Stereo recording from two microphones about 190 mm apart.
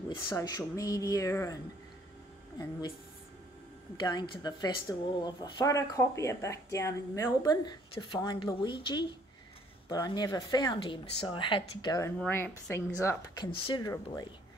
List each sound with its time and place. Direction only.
0.4 s speech: 15° left (ahead or behind)
3.9 s speech: 20° left (ahead or behind)
12.2 s speech: 10° left (ahead or behind)
13.4 s speech: 25° left (ahead or behind)